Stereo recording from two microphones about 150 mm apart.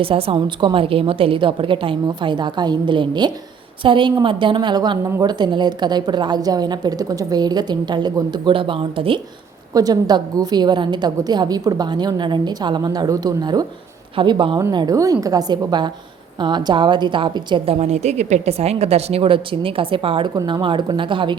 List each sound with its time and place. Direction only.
0.0 s a woman's voice: 40° right (ahead or behind)
17.7 s a woman's voice: 45° right (ahead or behind)